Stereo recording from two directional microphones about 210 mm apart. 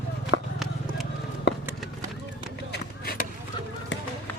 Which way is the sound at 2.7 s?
45° left (ahead or behind).